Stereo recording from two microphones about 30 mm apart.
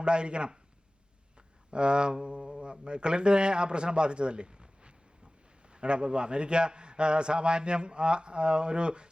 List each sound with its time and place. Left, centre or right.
0.0 s a man's voice: right